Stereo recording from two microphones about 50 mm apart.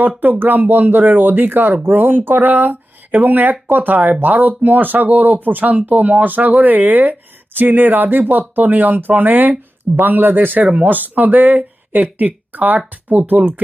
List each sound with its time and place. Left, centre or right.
0.2 s speech: right